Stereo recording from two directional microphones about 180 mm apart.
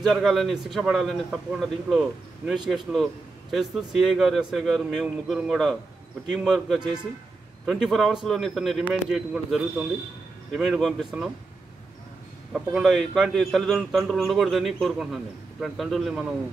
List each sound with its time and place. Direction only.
0.0 s a man's voice: centre (ahead or behind)
12.5 s a man's voice: centre (ahead or behind)